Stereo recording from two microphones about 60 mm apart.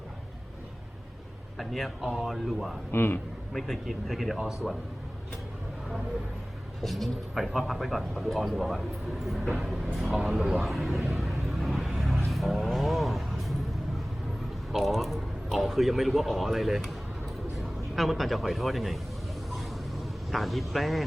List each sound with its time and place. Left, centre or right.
1.5 s speech: centre
2.9 s a man's voice: left
3.5 s speech: centre
6.8 s speech: centre
10.6 s a sound: centre
12.2 s speech: centre
14.7 s a man's voice: centre
17.9 s speech: centre
19.5 s vehicle: centre